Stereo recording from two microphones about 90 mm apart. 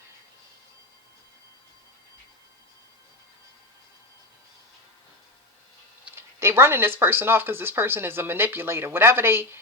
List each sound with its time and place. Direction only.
6.1 s speech: 30° right (ahead or behind)